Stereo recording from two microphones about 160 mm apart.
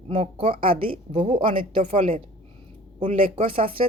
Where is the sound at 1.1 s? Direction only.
50° right (ahead or behind).